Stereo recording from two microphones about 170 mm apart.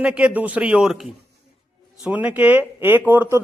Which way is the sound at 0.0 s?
5° right (ahead or behind).